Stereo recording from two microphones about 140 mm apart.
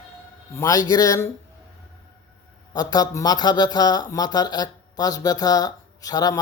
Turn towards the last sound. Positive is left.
turn(degrees=25)  # may be behind; listen again after turning